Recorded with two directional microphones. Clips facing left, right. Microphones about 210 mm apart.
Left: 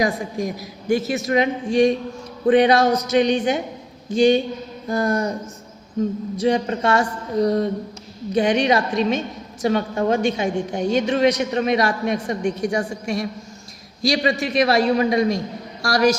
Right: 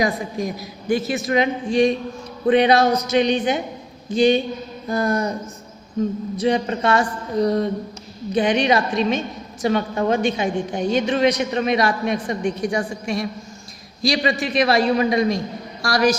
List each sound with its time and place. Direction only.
0.0 s a woman's voice: 45° left (ahead or behind)
6.3 s a woman's voice: 45° left (ahead or behind)